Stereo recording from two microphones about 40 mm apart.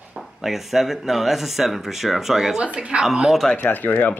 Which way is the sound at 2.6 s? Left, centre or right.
Right.